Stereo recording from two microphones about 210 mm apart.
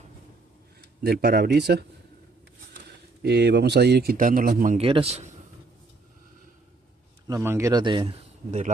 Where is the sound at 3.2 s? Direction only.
55° right (ahead or behind).